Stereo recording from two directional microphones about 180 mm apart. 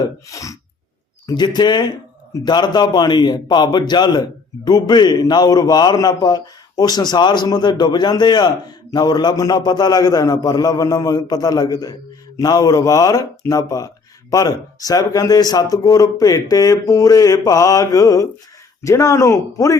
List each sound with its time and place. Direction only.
0.0 s a man's voice: 20° left (ahead or behind)